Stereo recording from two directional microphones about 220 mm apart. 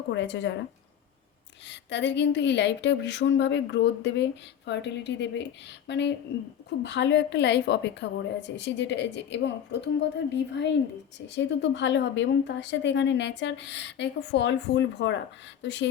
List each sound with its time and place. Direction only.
0.1 s speech: 55° left (ahead or behind)
1.7 s a woman's voice: 50° left (ahead or behind)